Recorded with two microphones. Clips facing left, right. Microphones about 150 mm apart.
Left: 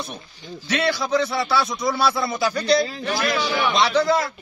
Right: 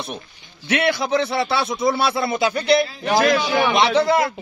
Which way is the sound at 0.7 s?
55° right (ahead or behind).